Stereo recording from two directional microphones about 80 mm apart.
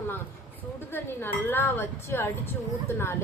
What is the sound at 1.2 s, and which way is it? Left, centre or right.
A woman's voice, left.